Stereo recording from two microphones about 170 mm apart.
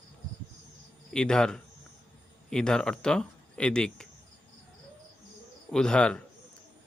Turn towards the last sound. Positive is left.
turn(degrees=5)  # may be behind; listen again after turning